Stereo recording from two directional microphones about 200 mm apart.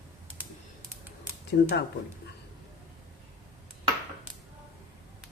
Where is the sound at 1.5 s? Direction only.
55° left (ahead or behind).